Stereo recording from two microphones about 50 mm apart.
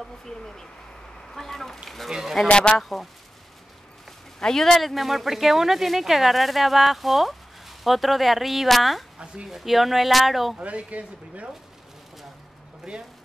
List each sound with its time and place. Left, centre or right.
0.3 s speech: centre
2.0 s speech: centre
2.5 s speech: left
2.8 s speech: centre
4.4 s speech: centre
9.2 s speech: centre
9.5 s speech: centre
10.6 s speech: right
12.9 s speech: centre